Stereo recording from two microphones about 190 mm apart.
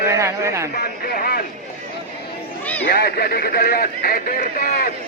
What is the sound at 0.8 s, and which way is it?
Speech, 50° left (ahead or behind).